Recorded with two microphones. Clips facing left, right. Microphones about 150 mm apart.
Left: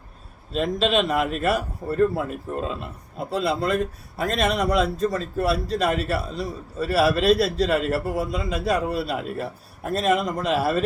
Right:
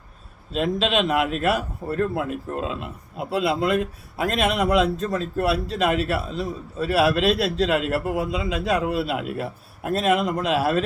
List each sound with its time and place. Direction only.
0.5 s a man's voice: centre (ahead or behind)